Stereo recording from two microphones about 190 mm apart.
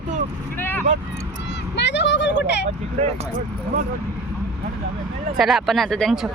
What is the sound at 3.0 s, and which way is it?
Speech, 40° right (ahead or behind).